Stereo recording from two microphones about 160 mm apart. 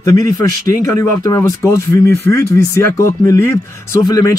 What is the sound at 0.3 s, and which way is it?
Speech, 20° left (ahead or behind).